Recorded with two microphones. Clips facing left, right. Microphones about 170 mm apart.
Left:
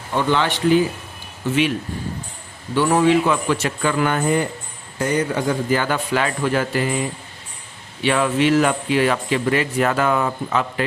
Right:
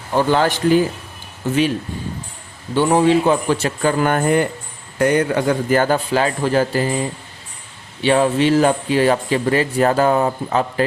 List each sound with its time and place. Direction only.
0.2 s speech: 40° right (ahead or behind)
2.7 s speech: 25° right (ahead or behind); by 6.0 s 45° right (ahead or behind)
6.1 s speech: 30° right (ahead or behind)
8.0 s speech: 30° right (ahead or behind)